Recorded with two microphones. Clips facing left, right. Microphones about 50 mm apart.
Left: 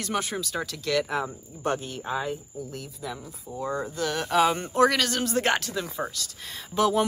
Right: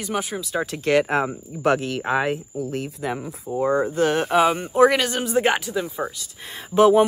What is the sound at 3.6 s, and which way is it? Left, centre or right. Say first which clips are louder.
Speech: right 9 dB; right.